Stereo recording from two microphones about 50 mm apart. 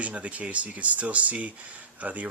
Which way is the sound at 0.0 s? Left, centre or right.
Right.